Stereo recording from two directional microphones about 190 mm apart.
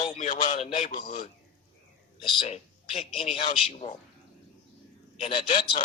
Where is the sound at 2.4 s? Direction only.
35° left (ahead or behind).